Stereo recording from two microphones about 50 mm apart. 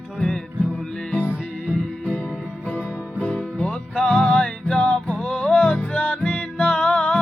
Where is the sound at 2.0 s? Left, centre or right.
Left.